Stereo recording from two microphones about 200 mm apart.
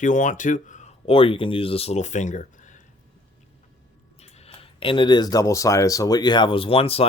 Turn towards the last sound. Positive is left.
turn(degrees=30)  # may be behind; listen again after turning